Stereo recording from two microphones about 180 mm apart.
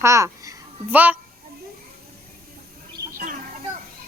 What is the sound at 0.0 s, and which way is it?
A child's voice, 15° right (ahead or behind).